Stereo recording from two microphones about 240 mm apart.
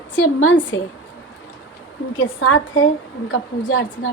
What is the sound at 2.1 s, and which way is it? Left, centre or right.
A woman's voice, left.